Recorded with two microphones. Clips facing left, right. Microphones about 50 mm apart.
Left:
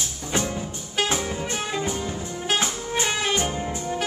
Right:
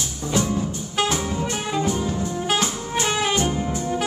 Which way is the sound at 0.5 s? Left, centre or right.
Centre.